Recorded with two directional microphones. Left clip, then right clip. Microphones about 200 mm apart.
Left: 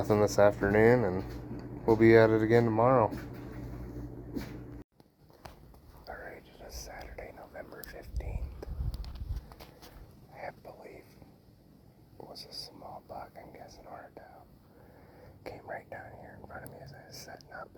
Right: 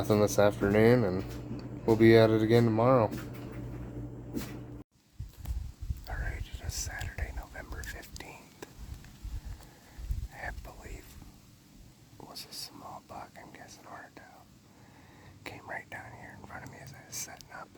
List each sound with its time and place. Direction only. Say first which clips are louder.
0.0 s speech: left 1 dB; 10° right (ahead or behind)
6.1 s whispering: right 2 dB; 20° right (ahead or behind)
12.3 s whispering: right 1 dB; 10° right (ahead or behind)
15.6 s whispering: right 2 dB; 20° right (ahead or behind)
17.2 s whispering: right 5 dB; 15° right (ahead or behind)